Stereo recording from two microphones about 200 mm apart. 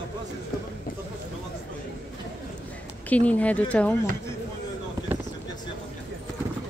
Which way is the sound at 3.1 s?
5° left (ahead or behind).